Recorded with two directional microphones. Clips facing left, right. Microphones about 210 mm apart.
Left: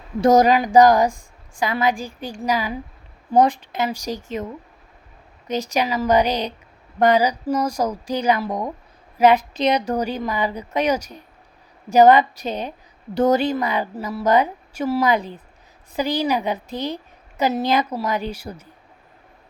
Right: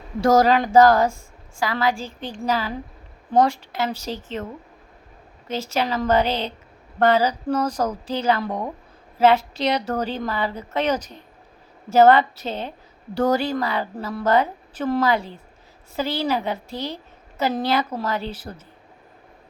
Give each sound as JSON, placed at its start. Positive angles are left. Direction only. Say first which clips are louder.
{"t": 0.2, "sound": "a woman's voice", "louder": "left 2 dB", "side_deg": 20}
{"t": 5.5, "sound": "a woman's voice", "louder": "left 2 dB", "side_deg": 15}
{"t": 14.0, "sound": "a woman's voice", "louder": "left 2 dB", "side_deg": 5}